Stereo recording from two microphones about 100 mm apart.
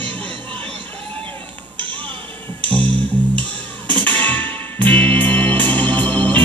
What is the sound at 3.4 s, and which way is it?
Music, 15° left (ahead or behind).